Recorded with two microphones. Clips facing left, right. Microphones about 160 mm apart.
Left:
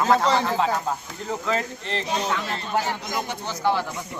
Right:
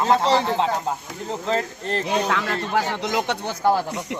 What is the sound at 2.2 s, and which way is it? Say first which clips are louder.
Speech: right 3 dB; 85° right.